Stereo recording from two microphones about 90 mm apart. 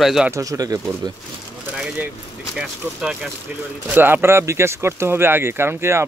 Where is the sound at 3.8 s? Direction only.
20° right (ahead or behind).